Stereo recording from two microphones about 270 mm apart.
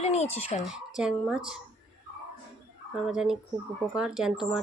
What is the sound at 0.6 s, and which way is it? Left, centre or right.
Speech, centre.